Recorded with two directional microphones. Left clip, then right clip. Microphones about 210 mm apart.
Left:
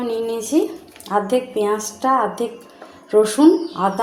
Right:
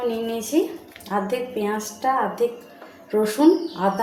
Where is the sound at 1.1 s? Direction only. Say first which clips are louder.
Left 6 dB; 40° left (ahead or behind).